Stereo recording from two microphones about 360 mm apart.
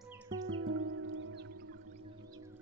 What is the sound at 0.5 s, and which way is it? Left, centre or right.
Music, right.